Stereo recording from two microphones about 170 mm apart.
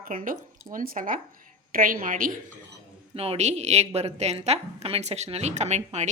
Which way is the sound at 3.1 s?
35° right (ahead or behind).